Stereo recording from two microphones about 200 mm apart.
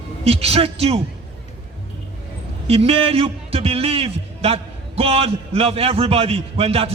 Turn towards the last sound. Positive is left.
turn(degrees=-30)  # may be behind; listen again after turning